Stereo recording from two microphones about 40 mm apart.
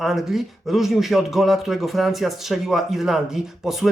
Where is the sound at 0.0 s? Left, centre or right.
Centre.